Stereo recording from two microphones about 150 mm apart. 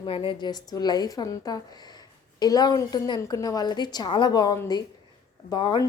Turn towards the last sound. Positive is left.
turn(degrees=30)  # may be behind; listen again after turning